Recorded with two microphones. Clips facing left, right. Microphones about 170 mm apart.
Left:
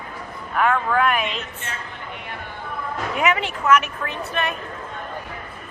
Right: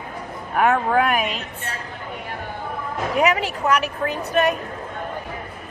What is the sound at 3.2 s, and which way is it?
A woman's voice, 40° right (ahead or behind).